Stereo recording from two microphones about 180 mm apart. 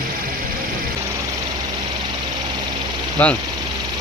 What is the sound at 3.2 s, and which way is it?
Speech, 10° left (ahead or behind).